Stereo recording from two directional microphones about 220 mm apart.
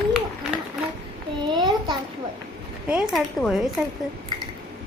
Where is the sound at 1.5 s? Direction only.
20° right (ahead or behind).